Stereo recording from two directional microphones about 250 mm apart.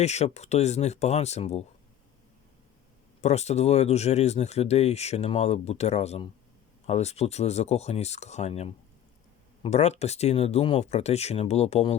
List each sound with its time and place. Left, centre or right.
0.0 s speech: left
3.2 s speech: left